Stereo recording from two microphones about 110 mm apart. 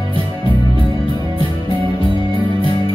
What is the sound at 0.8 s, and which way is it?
Music, 50° right (ahead or behind).